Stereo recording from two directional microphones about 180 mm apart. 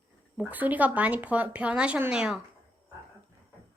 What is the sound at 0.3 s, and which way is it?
Speech, 10° right (ahead or behind).